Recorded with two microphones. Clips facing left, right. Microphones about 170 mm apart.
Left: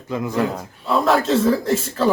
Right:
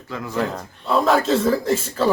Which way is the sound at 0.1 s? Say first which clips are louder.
Left 6 dB; 20° left (ahead or behind).